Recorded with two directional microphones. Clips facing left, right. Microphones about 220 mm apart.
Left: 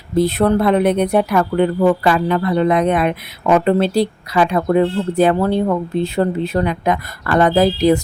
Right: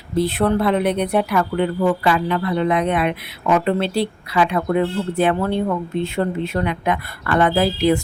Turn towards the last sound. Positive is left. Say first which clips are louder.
# left 4 dB
turn(degrees=40)  # may be behind; listen again after turning